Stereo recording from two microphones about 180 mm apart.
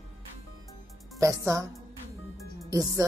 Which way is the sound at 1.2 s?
15° right (ahead or behind).